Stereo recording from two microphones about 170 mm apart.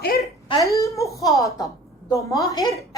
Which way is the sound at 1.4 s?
20° left (ahead or behind).